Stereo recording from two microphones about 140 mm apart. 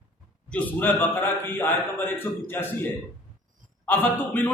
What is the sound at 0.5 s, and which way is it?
A man's voice, 10° left (ahead or behind).